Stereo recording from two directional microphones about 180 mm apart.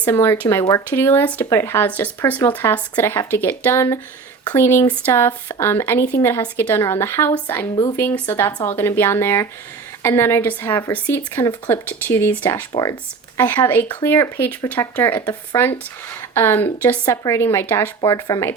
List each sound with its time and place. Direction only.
0.0 s speech: 15° left (ahead or behind)
12.7 s speech: 20° left (ahead or behind)